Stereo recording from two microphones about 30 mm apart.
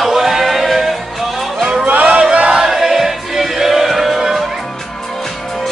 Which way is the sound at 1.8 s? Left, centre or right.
Right.